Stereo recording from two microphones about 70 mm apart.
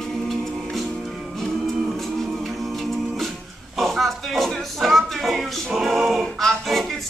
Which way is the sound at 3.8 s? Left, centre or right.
Centre.